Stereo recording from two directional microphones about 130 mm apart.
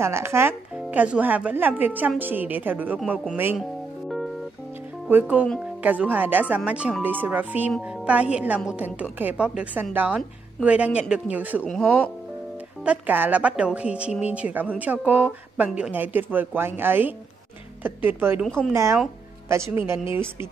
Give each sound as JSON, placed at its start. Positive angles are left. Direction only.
{"t": 0.0, "sound": "speech", "side_deg": -20}
{"t": 0.8, "sound": "speech", "side_deg": -10}
{"t": 5.1, "sound": "speech", "side_deg": -10}
{"t": 11.6, "sound": "speech", "side_deg": 5}
{"t": 12.8, "sound": "speech", "side_deg": -10}
{"t": 18.4, "sound": "speech", "side_deg": 5}
{"t": 18.7, "sound": "speech", "side_deg": -20}